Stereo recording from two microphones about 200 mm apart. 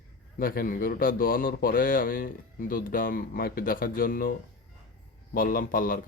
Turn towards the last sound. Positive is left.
turn(degrees=45)  # may be behind; listen again after turning